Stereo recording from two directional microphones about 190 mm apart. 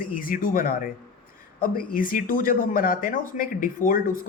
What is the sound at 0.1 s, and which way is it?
Speech, 45° left (ahead or behind).